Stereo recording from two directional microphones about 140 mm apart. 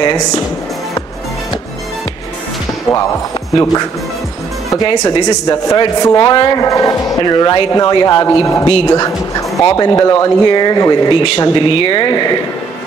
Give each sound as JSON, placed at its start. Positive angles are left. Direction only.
{"t": 3.5, "sound": "speech", "side_deg": 25}
{"t": 6.6, "sound": "speech", "side_deg": 25}